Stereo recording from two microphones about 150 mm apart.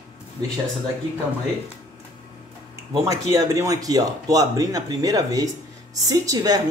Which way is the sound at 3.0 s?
20° right (ahead or behind).